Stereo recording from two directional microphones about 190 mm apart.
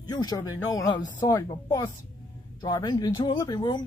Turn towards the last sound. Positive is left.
turn(degrees=20)  # may be behind; listen again after turning